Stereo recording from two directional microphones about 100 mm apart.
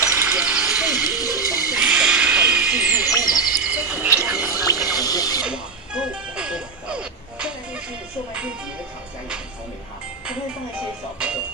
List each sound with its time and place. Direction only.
0.1 s a sound: 15° right (ahead or behind)
1.1 s a sound: 35° left (ahead or behind)
1.7 s a sound: 10° right (ahead or behind)
3.1 s music: 35° left (ahead or behind)
3.6 s frog: 15° right (ahead or behind)
4.2 s music: 20° right (ahead or behind)
4.5 s music: 35° left (ahead or behind)
5.4 s music: 10° right (ahead or behind)
11.1 s music: 10° right (ahead or behind)